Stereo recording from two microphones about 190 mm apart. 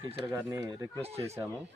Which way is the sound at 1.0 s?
30° right (ahead or behind).